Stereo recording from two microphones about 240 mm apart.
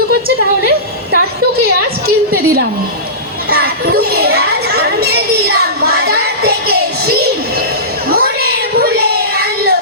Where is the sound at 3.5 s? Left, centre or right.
Right.